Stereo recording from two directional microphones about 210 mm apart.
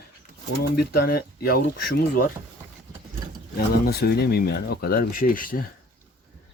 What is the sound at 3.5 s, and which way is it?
Speech, 45° left (ahead or behind).